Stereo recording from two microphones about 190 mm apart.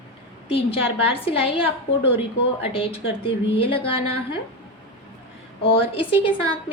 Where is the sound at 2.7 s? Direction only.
30° left (ahead or behind).